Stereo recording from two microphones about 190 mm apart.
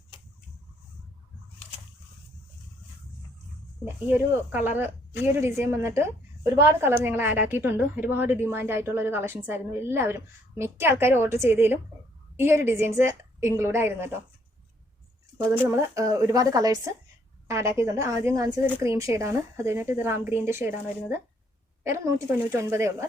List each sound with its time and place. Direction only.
3.8 s a woman's voice: 10° right (ahead or behind)
15.4 s a woman's voice: 15° right (ahead or behind)